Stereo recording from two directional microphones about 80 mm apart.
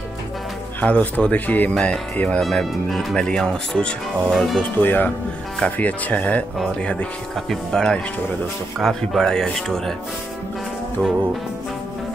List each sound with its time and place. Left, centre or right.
0.7 s speech: centre
2.4 s speech: centre
4.7 s speech: left
7.3 s speech: centre